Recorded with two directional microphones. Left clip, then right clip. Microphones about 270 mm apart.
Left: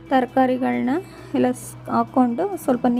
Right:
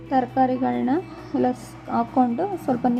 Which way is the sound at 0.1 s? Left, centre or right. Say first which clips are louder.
Left 2 dB; left.